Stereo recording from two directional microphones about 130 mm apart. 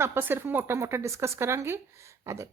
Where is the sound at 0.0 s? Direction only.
20° right (ahead or behind).